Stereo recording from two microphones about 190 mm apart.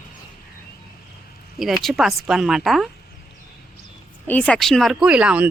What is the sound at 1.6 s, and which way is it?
A woman's voice, centre (ahead or behind).